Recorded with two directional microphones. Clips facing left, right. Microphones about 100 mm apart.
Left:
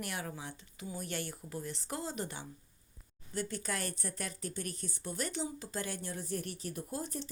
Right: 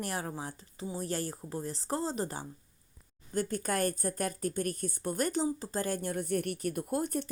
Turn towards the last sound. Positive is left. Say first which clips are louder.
# right 8 dB
turn(degrees=-55)  # may be behind; listen again after turning